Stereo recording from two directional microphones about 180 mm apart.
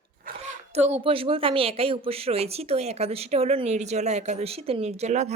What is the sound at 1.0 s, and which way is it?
Speech, 30° right (ahead or behind).